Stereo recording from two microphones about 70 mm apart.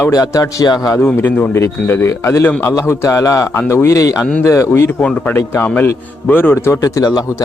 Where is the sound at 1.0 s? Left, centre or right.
Left.